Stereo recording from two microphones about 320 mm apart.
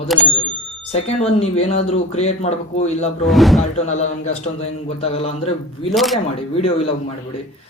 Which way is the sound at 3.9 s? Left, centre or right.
Left.